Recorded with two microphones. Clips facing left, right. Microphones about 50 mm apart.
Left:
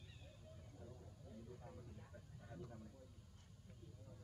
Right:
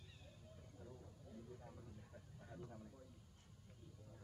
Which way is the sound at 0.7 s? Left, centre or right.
Centre.